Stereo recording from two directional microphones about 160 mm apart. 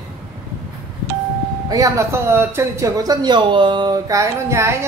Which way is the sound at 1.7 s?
20° right (ahead or behind).